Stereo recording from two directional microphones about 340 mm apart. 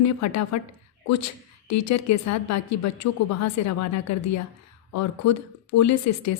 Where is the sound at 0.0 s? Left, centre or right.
Left.